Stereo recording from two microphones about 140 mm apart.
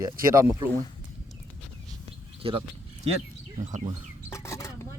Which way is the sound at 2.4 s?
40° right (ahead or behind).